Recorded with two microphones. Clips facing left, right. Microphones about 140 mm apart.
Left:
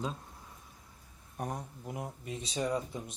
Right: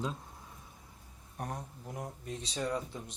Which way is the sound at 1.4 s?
10° left (ahead or behind).